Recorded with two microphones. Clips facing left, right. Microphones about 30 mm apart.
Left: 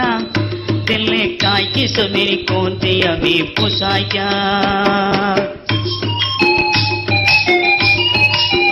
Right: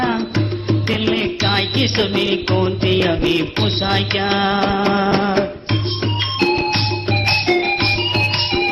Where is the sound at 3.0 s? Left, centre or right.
Left.